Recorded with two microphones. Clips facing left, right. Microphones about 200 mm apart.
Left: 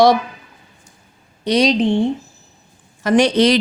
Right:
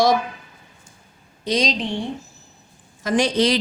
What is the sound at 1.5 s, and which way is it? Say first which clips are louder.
Speech: left 6 dB; 65° left (ahead or behind).